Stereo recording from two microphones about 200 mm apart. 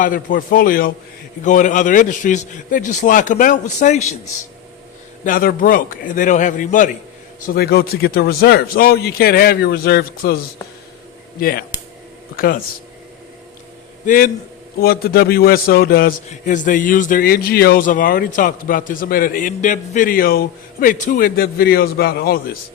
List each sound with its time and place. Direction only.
0.0 s a man's voice: 45° left (ahead or behind)
5.2 s a man's voice: 45° left (ahead or behind)
7.4 s a man's voice: 50° left (ahead or behind)
11.3 s a man's voice: 45° left (ahead or behind)
14.0 s a man's voice: 45° left (ahead or behind)